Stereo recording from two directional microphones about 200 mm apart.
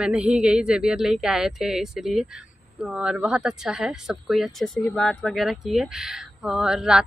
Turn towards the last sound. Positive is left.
turn(degrees=-5)  # may be behind; listen again after turning